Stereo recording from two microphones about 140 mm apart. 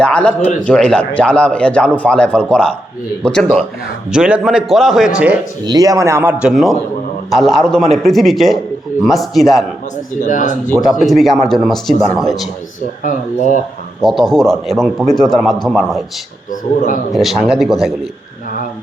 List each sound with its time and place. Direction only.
0.0 s speech: 10° left (ahead or behind)
4.1 s a man's voice: 5° right (ahead or behind)
5.6 s speech: 25° right (ahead or behind)
6.4 s a man's voice: centre (ahead or behind)
10.2 s speech: 65° left (ahead or behind)
11.0 s a man's voice: centre (ahead or behind)
13.0 s speech: 70° left (ahead or behind)
14.0 s a man's voice: centre (ahead or behind)
16.5 s speech: 65° left (ahead or behind)
17.1 s a man's voice: centre (ahead or behind)